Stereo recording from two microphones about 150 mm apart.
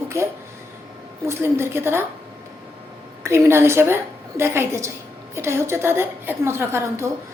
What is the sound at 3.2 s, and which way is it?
A woman's voice, 15° right (ahead or behind).